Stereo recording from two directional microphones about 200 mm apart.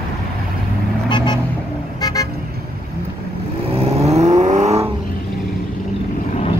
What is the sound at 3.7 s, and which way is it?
Vehicle, 30° right (ahead or behind).